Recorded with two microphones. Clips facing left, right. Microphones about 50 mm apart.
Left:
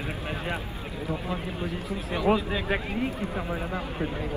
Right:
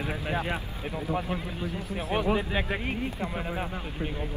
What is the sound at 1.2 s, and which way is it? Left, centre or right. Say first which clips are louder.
Speech: left 1 dB; left.